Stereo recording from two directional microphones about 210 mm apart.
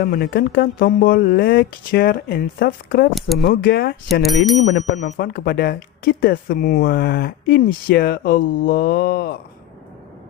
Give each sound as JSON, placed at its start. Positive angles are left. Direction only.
{"t": 0.0, "sound": "speech", "side_deg": 45}
{"t": 3.2, "sound": "speech", "side_deg": 0}
{"t": 3.4, "sound": "speech", "side_deg": 45}
{"t": 4.1, "sound": "speech", "side_deg": 0}
{"t": 4.6, "sound": "speech", "side_deg": 55}